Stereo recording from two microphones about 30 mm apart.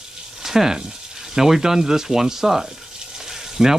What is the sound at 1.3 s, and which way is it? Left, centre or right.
Speech, centre.